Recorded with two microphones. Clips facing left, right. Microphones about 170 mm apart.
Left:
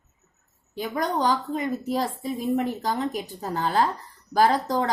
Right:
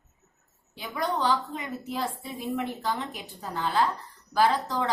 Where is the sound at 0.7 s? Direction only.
45° left (ahead or behind).